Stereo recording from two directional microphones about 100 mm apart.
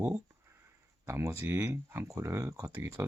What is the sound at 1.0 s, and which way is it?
Speech, 30° right (ahead or behind).